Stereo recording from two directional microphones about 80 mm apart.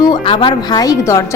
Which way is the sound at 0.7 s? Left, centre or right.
Left.